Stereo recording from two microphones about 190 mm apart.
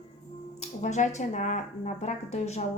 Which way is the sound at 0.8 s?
40° left (ahead or behind).